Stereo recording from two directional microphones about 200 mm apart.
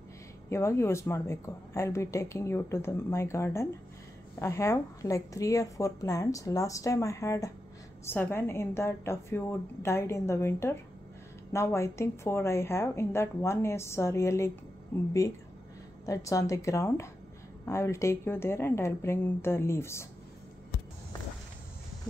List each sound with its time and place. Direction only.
0.5 s a woman's voice: 15° left (ahead or behind)
16.1 s a woman's voice: 15° left (ahead or behind)